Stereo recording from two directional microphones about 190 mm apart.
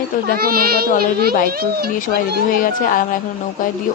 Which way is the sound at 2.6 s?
45° left (ahead or behind).